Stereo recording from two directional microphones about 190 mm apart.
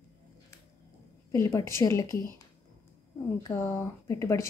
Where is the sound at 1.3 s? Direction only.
15° left (ahead or behind).